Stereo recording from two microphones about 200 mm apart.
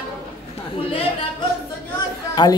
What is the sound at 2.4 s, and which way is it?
Speech, 20° left (ahead or behind).